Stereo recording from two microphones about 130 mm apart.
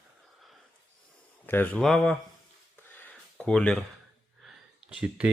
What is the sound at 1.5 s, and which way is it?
Speech, 15° left (ahead or behind).